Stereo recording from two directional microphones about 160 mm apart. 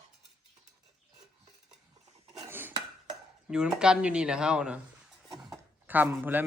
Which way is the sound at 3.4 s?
5° right (ahead or behind).